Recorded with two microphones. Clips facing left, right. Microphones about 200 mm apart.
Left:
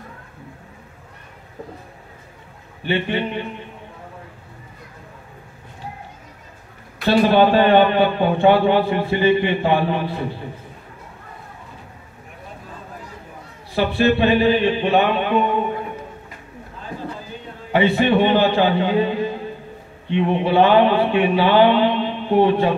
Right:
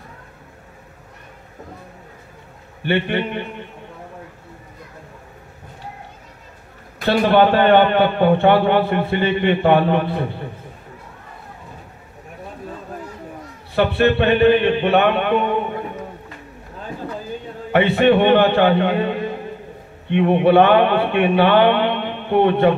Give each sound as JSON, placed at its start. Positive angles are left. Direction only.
{"t": 2.8, "sound": "a man's voice", "side_deg": -60}
{"t": 7.1, "sound": "a man's voice", "side_deg": -60}
{"t": 13.7, "sound": "a man's voice", "side_deg": -60}
{"t": 17.7, "sound": "a man's voice", "side_deg": -60}